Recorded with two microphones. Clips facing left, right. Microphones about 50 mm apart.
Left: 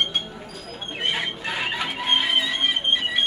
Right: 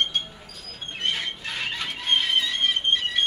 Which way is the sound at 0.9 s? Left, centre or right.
Centre.